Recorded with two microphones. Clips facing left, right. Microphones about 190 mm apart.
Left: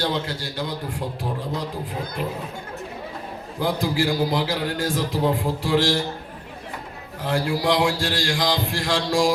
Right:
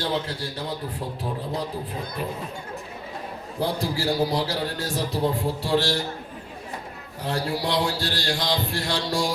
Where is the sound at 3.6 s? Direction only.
90° left.